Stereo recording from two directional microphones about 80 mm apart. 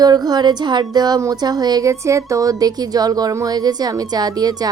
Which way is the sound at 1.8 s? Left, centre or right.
Right.